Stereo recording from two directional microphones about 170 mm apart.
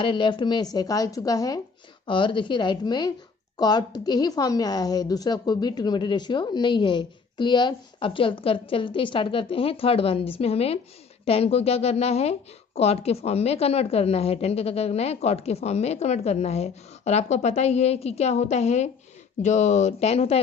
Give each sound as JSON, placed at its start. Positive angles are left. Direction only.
{"t": 0.0, "sound": "a woman's voice", "side_deg": 30}